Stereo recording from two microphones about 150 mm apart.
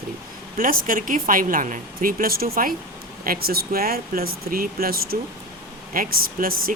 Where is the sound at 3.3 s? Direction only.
90° right.